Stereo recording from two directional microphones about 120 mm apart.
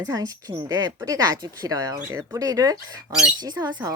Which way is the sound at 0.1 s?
30° right (ahead or behind).